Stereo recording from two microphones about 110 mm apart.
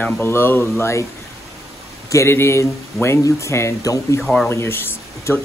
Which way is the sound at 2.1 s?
25° left (ahead or behind).